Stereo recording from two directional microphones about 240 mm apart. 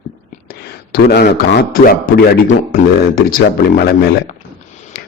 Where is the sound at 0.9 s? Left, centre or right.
Left.